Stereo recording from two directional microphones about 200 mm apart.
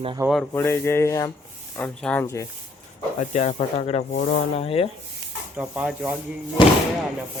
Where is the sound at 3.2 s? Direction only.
35° left (ahead or behind).